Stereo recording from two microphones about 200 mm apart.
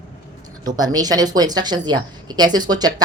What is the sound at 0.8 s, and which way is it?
A woman's voice, 20° right (ahead or behind).